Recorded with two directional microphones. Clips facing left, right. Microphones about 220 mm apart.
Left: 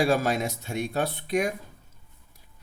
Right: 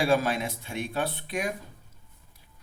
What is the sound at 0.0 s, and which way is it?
Speech, 45° left (ahead or behind).